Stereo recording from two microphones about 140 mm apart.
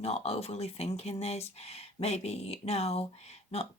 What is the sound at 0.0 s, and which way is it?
Speech, 50° left (ahead or behind).